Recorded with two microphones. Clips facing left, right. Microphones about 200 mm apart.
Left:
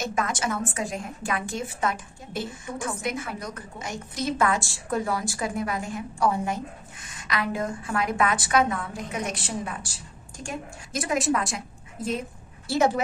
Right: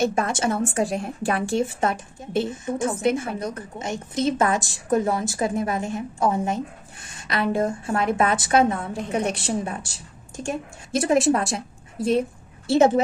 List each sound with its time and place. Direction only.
0.0 s a woman's voice: 30° right (ahead or behind)
12.6 s a woman's voice: 25° right (ahead or behind)